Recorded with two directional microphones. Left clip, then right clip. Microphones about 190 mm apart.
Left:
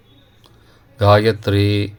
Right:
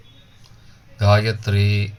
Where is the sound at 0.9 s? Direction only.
50° left (ahead or behind).